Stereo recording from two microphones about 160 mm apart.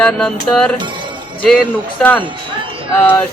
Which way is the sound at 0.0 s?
5° left (ahead or behind).